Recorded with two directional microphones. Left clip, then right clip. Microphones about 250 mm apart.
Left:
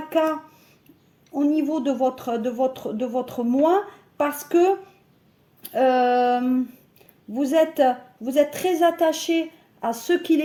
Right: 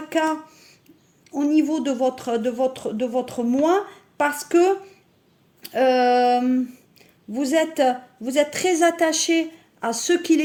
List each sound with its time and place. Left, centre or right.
0.1 s speech: right
5.6 s speech: right
9.0 s speech: right
9.8 s speech: right